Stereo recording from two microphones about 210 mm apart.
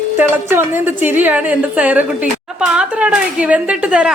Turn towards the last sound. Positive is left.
turn(degrees=-5)  # may be behind; listen again after turning